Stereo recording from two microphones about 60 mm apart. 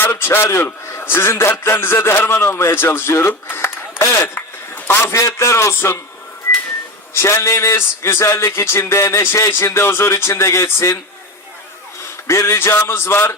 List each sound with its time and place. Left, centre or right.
0.0 s a man's voice: left
1.4 s a man's voice: left
4.4 s a sound: left
5.1 s a man's voice: left
7.1 s a man's voice: left
12.3 s a man's voice: left